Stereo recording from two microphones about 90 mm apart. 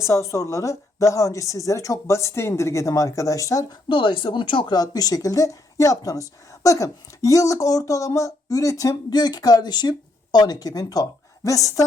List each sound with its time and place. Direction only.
0.0 s speech: 35° left (ahead or behind)
3.8 s speech: 65° left (ahead or behind)
4.7 s a woman's voice: 45° left (ahead or behind)